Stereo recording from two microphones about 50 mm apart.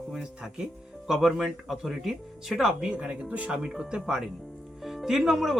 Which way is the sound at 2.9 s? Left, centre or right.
Right.